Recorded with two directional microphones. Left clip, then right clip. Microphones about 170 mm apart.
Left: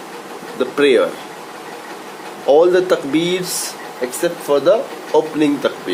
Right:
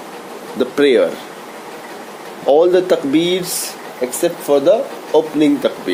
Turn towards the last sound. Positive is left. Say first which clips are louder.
# right 2 dB
turn(degrees=-20)  # may be behind; listen again after turning